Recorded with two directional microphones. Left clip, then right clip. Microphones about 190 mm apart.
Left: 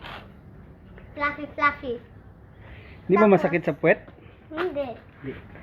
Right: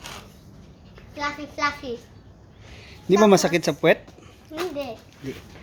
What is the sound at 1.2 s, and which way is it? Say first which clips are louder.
Speech: left 2 dB; 10° left (ahead or behind).